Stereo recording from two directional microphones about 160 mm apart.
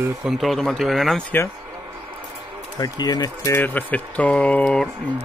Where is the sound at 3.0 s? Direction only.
25° left (ahead or behind).